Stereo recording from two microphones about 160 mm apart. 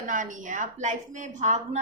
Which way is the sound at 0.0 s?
55° right (ahead or behind).